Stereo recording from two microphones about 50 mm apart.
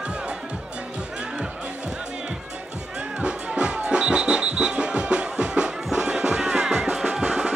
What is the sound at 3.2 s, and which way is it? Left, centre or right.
Music, right.